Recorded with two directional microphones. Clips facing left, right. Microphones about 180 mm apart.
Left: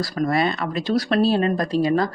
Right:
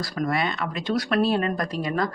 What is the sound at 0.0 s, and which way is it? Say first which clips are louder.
Speech: left 5 dB; 35° left (ahead or behind).